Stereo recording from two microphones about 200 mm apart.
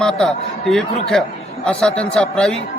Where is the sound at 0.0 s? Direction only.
5° left (ahead or behind).